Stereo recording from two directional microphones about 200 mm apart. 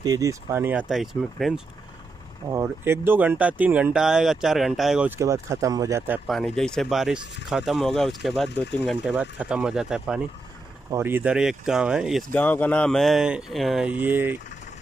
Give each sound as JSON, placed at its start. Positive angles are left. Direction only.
{"t": 0.0, "sound": "speech", "side_deg": -15}
{"t": 2.5, "sound": "speech", "side_deg": -10}
{"t": 6.2, "sound": "speech", "side_deg": 0}
{"t": 12.3, "sound": "speech", "side_deg": 10}